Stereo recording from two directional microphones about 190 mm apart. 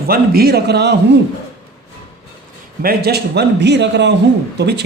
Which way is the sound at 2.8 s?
55° right (ahead or behind).